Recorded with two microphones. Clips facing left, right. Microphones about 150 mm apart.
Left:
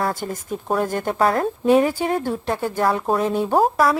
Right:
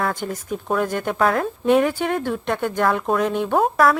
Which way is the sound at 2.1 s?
35° left (ahead or behind).